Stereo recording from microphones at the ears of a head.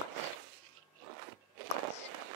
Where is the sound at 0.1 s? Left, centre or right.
Right.